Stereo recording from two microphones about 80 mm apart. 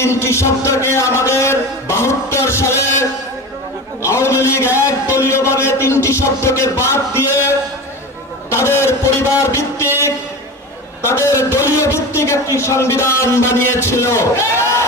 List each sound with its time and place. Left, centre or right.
0.0 s a man's voice: left
11.1 s a man's voice: left